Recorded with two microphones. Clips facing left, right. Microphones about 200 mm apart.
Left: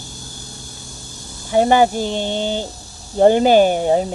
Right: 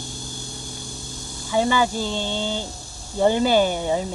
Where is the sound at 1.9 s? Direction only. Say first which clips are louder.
Left 5 dB; 15° left (ahead or behind).